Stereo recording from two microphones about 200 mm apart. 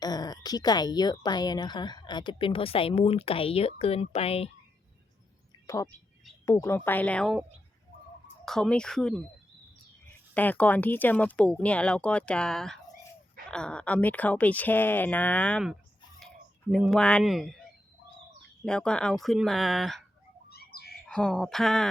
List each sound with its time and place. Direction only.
0.0 s speech: 20° left (ahead or behind)
5.6 s speech: 15° left (ahead or behind)
8.4 s speech: centre (ahead or behind)
10.3 s speech: 10° left (ahead or behind)
16.7 s speech: centre (ahead or behind)
18.6 s speech: 5° left (ahead or behind)
20.5 s bird: 50° left (ahead or behind)
21.1 s speech: 5° left (ahead or behind)